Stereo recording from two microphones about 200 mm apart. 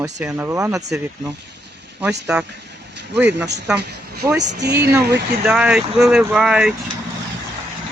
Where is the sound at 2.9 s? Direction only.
60° right (ahead or behind).